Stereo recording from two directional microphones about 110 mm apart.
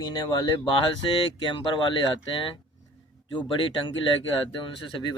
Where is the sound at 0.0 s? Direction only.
40° left (ahead or behind).